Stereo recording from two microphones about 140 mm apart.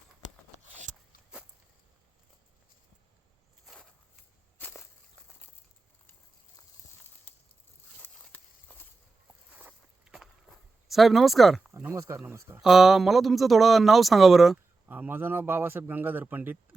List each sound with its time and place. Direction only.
4.6 s walk: 20° left (ahead or behind)
8.0 s walk: 10° left (ahead or behind)
9.5 s walk: 10° right (ahead or behind)
11.7 s speech: 20° right (ahead or behind)
12.6 s speech: 5° right (ahead or behind)
14.8 s a man's voice: 15° right (ahead or behind)